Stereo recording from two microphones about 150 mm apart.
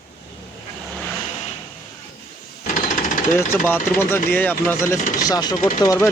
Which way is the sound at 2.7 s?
60° left (ahead or behind).